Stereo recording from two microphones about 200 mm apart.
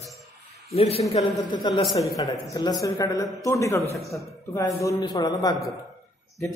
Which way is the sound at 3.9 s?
Centre (ahead or behind).